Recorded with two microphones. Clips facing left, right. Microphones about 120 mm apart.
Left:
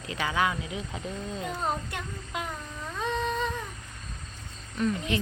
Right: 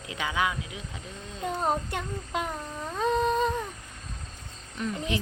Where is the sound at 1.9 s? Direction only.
40° right (ahead or behind).